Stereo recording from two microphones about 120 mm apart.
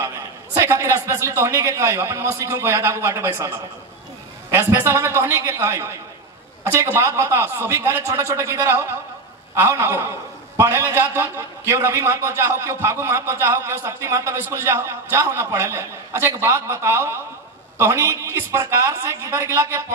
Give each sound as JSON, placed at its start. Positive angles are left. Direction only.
{"t": 0.6, "sound": "a man's voice", "side_deg": -20}